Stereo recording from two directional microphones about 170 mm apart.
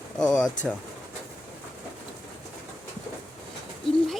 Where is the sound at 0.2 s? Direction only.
5° left (ahead or behind).